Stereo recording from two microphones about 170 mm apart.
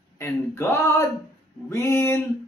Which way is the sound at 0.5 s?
15° left (ahead or behind).